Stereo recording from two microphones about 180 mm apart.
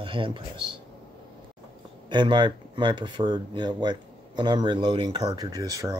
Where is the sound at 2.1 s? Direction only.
25° right (ahead or behind).